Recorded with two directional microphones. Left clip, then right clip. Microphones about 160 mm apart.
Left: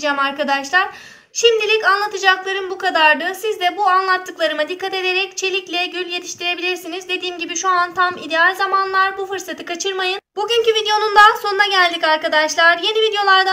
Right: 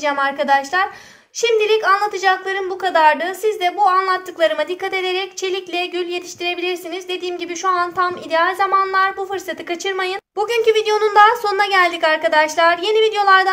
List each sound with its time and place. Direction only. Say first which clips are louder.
0.0 s a woman's voice: even; 45° right (ahead or behind)